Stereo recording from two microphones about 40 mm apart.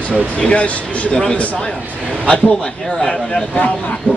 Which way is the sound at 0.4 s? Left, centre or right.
Left.